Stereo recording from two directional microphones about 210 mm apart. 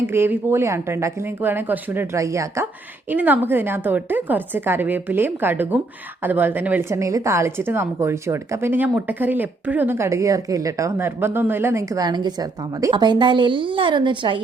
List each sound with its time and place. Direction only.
0.1 s a woman's voice: 10° right (ahead or behind)